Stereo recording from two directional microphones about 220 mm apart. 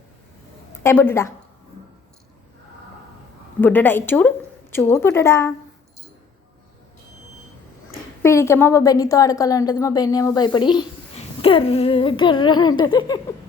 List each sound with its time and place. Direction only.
0.8 s a woman's voice: 10° left (ahead or behind)
3.6 s a woman's voice: 10° left (ahead or behind)
8.2 s a woman's voice: 10° left (ahead or behind)